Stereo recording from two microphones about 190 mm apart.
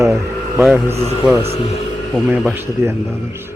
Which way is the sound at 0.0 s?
15° right (ahead or behind).